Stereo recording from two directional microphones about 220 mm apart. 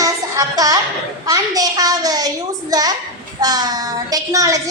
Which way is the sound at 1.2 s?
15° right (ahead or behind).